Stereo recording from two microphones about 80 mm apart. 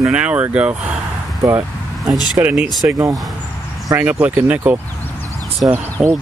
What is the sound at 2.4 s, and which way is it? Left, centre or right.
Speech, right.